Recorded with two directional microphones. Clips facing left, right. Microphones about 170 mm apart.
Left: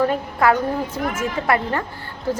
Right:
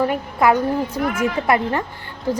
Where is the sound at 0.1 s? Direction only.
15° right (ahead or behind).